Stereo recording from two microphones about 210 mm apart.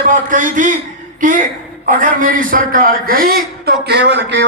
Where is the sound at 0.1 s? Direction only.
40° right (ahead or behind).